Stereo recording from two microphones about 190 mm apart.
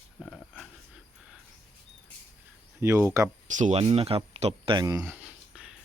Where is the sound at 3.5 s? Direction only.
40° right (ahead or behind); by 5.0 s 20° right (ahead or behind).